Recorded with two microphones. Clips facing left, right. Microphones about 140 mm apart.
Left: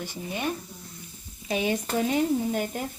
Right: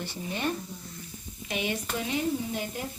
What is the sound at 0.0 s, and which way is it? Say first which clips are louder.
Speech: left 1 dB; 10° left (ahead or behind).